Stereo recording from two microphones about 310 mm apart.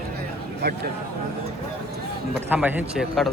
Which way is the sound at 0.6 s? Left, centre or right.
Right.